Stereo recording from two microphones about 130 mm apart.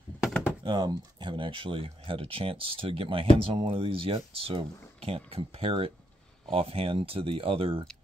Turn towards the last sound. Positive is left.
turn(degrees=-45)  # may be behind; listen again after turning